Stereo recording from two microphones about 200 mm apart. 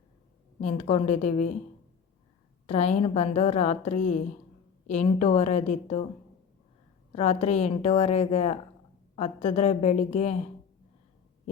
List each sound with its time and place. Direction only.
0.6 s a woman's voice: 30° left (ahead or behind)
2.6 s a woman's voice: 35° left (ahead or behind)
7.1 s a woman's voice: 30° left (ahead or behind)